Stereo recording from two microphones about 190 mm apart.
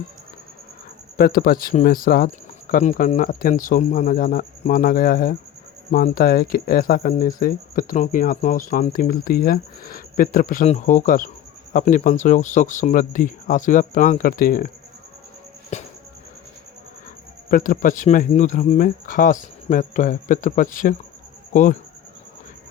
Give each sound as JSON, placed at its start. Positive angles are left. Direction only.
{"t": 1.1, "sound": "speech", "side_deg": 55}
{"t": 15.7, "sound": "music", "side_deg": 35}
{"t": 17.5, "sound": "speech", "side_deg": 45}